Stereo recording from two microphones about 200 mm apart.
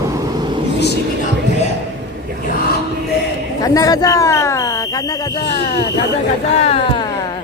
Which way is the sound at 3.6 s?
20° left (ahead or behind).